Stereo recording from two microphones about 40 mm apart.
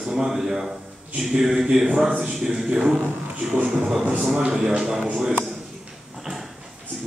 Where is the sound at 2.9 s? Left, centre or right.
Centre.